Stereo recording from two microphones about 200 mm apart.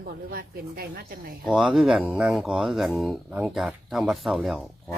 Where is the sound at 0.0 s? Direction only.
45° right (ahead or behind).